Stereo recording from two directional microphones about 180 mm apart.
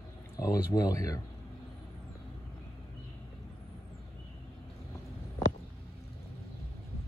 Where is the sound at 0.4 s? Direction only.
20° left (ahead or behind).